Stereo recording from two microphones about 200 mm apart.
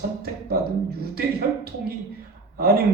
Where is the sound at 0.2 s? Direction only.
50° right (ahead or behind).